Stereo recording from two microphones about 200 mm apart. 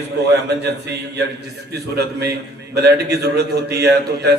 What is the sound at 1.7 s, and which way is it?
A man's voice, 55° right (ahead or behind).